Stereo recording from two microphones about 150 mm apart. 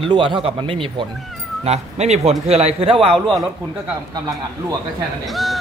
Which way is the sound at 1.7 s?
50° right (ahead or behind).